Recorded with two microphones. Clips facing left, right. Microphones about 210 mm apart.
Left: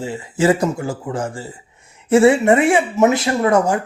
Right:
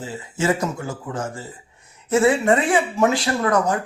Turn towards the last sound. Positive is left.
turn(degrees=25)  # may be behind; listen again after turning